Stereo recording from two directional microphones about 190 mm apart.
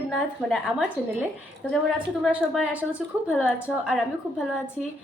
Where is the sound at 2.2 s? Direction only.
5° right (ahead or behind).